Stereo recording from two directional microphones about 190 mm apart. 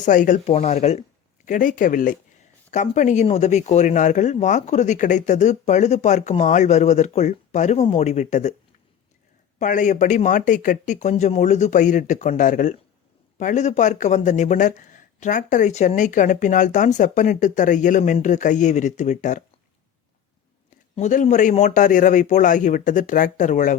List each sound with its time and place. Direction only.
0.0 s speech: 45° left (ahead or behind)
9.6 s speech: 40° left (ahead or behind)
20.9 s speech: 40° left (ahead or behind)